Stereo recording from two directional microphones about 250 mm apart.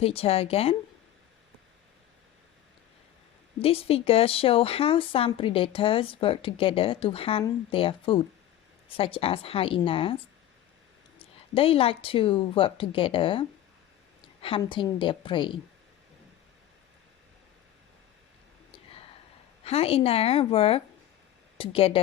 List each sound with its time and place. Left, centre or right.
0.0 s speech: left
3.6 s speech: left
11.2 s a woman's voice: left
19.6 s speech: left